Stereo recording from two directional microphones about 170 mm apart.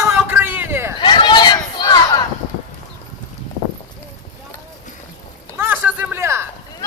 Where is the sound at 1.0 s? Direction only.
30° left (ahead or behind).